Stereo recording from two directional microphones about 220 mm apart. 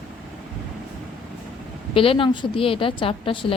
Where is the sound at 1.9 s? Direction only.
25° left (ahead or behind).